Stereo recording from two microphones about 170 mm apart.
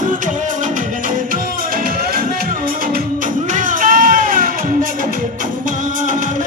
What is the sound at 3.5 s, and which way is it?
Music, 50° right (ahead or behind).